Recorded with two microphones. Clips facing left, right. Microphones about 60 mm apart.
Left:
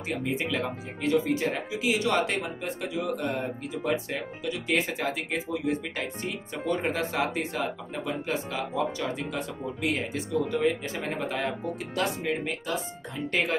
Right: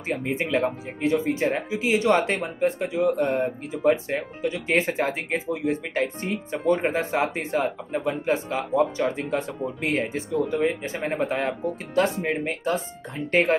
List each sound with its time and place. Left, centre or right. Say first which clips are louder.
0.1 s speech: right 5 dB; right